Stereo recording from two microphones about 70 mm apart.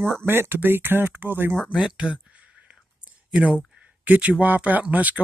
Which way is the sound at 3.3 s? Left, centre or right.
Centre.